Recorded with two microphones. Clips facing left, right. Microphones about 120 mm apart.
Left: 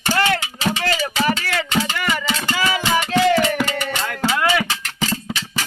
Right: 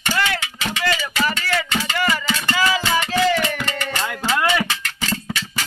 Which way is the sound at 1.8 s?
25° left (ahead or behind).